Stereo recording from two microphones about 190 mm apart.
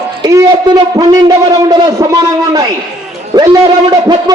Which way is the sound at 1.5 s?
20° right (ahead or behind).